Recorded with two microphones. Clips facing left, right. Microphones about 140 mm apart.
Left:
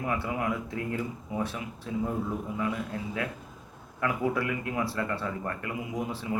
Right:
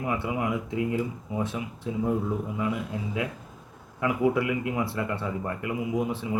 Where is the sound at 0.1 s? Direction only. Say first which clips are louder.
Right 3 dB; 15° right (ahead or behind).